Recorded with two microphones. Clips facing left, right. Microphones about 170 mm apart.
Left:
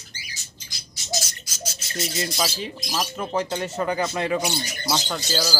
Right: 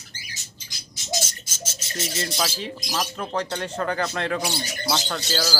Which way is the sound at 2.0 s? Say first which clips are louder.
Left 1 dB; 10° left (ahead or behind).